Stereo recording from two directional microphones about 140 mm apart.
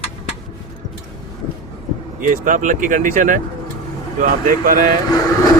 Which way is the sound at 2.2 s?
75° right (ahead or behind).